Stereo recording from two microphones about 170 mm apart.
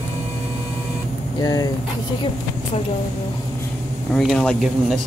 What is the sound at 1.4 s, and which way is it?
Speech, 25° left (ahead or behind).